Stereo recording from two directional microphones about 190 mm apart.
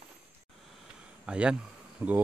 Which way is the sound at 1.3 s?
5° right (ahead or behind).